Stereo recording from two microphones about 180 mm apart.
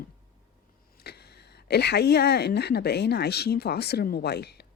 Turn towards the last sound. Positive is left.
turn(degrees=65)  # may be behind; listen again after turning